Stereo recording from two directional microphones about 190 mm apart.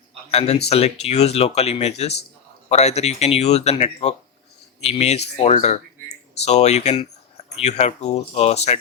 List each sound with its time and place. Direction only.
0.3 s speech: 35° left (ahead or behind)